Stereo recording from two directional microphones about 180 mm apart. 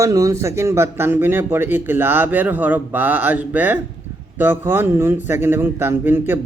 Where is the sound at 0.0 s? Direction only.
20° right (ahead or behind).